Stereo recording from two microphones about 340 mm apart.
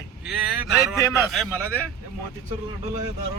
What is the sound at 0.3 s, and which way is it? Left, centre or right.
A man's voice, centre.